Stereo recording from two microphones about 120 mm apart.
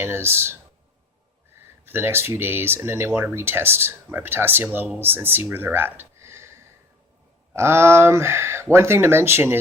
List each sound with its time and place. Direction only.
0.0 s speech: 20° right (ahead or behind)
1.8 s speech: 20° right (ahead or behind)